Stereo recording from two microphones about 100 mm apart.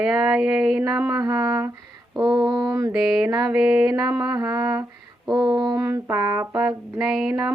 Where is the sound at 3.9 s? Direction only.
35° right (ahead or behind).